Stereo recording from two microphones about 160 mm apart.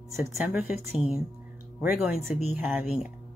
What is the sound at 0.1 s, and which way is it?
Speech, 15° right (ahead or behind).